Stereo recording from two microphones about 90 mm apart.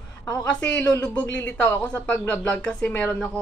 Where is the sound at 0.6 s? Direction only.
15° left (ahead or behind).